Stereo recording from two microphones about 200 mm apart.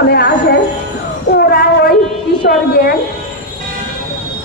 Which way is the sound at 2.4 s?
50° left (ahead or behind).